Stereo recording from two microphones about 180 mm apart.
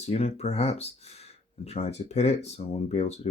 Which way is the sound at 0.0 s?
35° left (ahead or behind).